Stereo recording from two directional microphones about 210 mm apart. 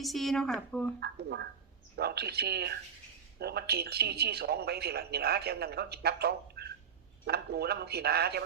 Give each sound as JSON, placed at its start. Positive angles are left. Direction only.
{"t": 0.0, "sound": "speech", "side_deg": 0}
{"t": 0.9, "sound": "a man's voice", "side_deg": -50}